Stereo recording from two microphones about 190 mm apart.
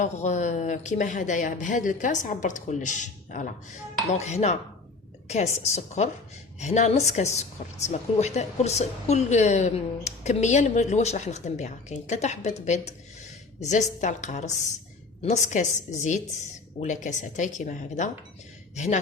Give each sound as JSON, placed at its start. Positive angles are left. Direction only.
{"t": 0.0, "sound": "a woman's voice", "side_deg": 40}
{"t": 14.0, "sound": "a woman's voice", "side_deg": 40}